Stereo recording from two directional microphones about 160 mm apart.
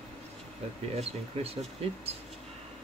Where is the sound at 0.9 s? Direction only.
40° right (ahead or behind).